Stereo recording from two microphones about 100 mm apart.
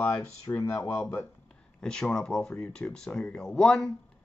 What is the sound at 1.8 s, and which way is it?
Speech, 5° left (ahead or behind).